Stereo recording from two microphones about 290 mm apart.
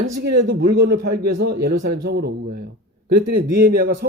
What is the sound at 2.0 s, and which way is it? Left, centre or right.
A man's voice, right.